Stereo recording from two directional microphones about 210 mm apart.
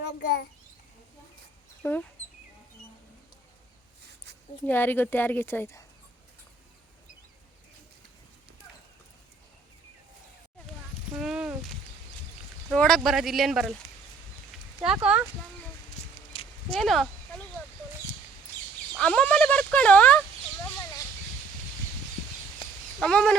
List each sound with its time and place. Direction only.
1.8 s a woman's voice: 10° left (ahead or behind)
4.6 s a woman's voice: 10° left (ahead or behind)
11.2 s speech: 5° right (ahead or behind)
12.7 s speech: 5° left (ahead or behind)
14.5 s a sound: 5° right (ahead or behind)
14.9 s speech: 5° right (ahead or behind)
16.3 s a sound: 25° left (ahead or behind)
16.7 s speech: centre (ahead or behind)
18.9 s speech: 5° left (ahead or behind)
23.0 s speech: centre (ahead or behind)